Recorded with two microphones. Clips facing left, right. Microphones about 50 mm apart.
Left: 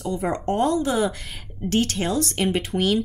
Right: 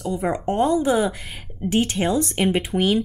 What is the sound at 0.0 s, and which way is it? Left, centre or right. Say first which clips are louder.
Speech: right 1 dB; centre.